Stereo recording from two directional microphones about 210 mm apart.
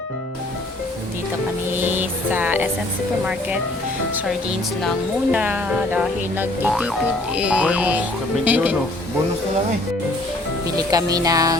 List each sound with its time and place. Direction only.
1.8 s music: 10° right (ahead or behind)
4.8 s speech: centre (ahead or behind)
10.8 s speech: 15° right (ahead or behind)